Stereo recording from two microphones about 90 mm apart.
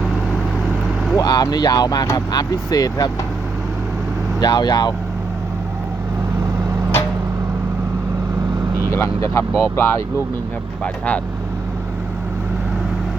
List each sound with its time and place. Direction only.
1.2 s speech: 50° left (ahead or behind)
4.4 s speech: 50° left (ahead or behind)
8.9 s speech: 30° left (ahead or behind)
10.8 s speech: 15° left (ahead or behind)